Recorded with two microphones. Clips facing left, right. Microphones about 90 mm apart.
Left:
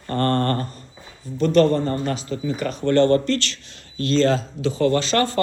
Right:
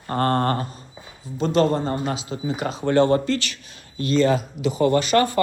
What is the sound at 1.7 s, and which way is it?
Speech, 25° right (ahead or behind).